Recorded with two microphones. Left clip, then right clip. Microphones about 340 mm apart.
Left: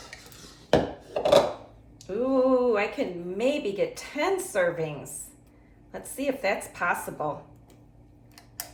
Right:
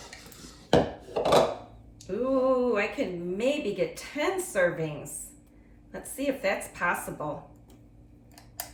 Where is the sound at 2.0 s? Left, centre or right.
Centre.